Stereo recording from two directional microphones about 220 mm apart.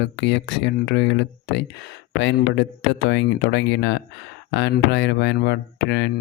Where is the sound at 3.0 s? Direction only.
50° left (ahead or behind).